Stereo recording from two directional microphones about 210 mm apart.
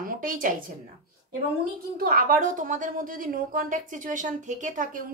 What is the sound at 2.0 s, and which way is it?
A woman's voice, 45° right (ahead or behind).